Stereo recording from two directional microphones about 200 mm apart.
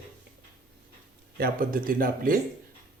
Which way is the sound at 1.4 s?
45° right (ahead or behind).